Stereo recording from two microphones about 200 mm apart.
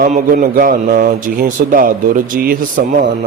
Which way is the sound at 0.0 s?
45° right (ahead or behind).